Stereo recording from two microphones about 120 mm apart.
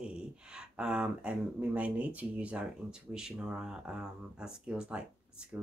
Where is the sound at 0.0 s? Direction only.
5° right (ahead or behind).